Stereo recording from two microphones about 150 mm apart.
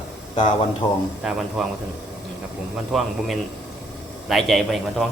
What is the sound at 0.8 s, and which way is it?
Speech, 40° left (ahead or behind).